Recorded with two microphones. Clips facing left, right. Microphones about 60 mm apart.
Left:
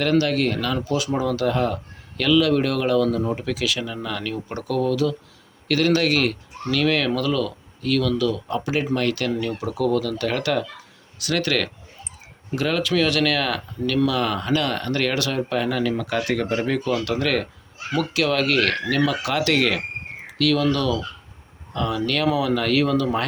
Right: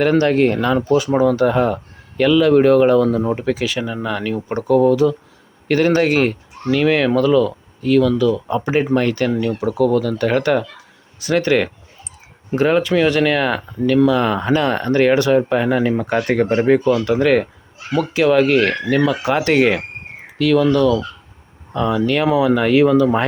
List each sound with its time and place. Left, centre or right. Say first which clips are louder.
0.2 s speech: right 6 dB; right
9.6 s speech: right 6 dB; centre; by 16.9 s right
16.9 s speech: right 7 dB; centre
20.4 s speech: right 6 dB; centre